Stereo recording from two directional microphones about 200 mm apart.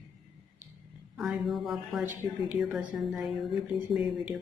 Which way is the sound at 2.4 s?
5° right (ahead or behind).